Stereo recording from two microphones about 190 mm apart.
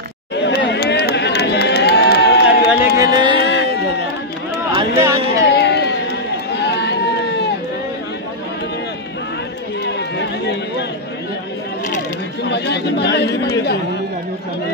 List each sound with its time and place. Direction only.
0.4 s chatter: 60° left (ahead or behind)
3.0 s music: 20° right (ahead or behind)
3.3 s a sound: 65° left (ahead or behind)
5.0 s a sound: 15° right (ahead or behind)
5.5 s crowd: 60° left (ahead or behind)
9.8 s run: 65° left (ahead or behind)
12.4 s speech: 65° left (ahead or behind)